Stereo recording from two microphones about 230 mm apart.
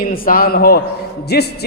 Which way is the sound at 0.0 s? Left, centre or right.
Left.